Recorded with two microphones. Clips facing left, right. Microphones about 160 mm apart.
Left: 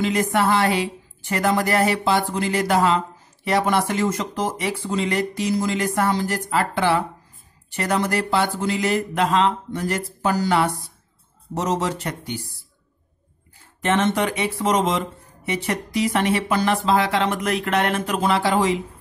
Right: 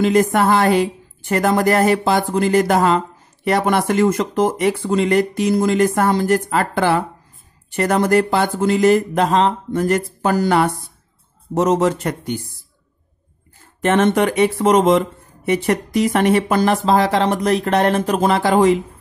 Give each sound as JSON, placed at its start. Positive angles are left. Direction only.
{"t": 0.0, "sound": "speech", "side_deg": -45}
{"t": 13.7, "sound": "speech", "side_deg": -50}